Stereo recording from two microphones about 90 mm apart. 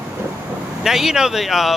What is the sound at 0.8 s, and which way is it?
Speech, 5° right (ahead or behind).